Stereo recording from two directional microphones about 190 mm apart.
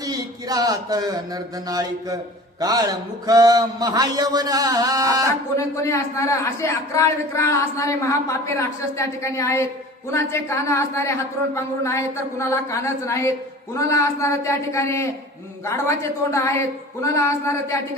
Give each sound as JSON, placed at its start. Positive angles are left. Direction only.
{"t": 0.0, "sound": "a man's voice", "side_deg": -20}
{"t": 5.5, "sound": "a man's voice", "side_deg": 15}
{"t": 16.3, "sound": "a man's voice", "side_deg": 15}